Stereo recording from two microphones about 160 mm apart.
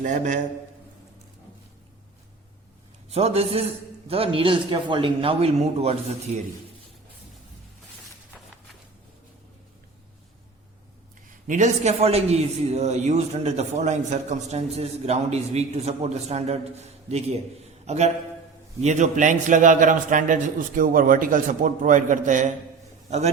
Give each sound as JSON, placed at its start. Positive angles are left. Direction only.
{"t": 0.0, "sound": "a man's voice", "side_deg": -50}
{"t": 3.1, "sound": "a man's voice", "side_deg": -40}
{"t": 11.4, "sound": "a man's voice", "side_deg": -50}